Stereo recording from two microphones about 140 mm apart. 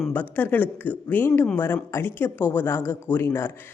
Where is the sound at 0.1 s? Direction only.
15° left (ahead or behind).